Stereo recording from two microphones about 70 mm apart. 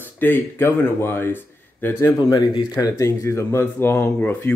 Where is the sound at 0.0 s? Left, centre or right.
Left.